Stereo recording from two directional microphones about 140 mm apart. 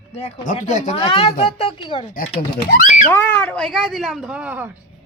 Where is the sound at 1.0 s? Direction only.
45° left (ahead or behind).